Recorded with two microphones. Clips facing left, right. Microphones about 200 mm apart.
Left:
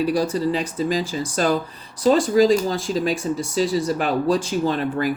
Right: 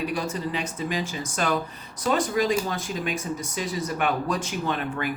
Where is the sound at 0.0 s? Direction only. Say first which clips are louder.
Left 8 dB; 35° left (ahead or behind).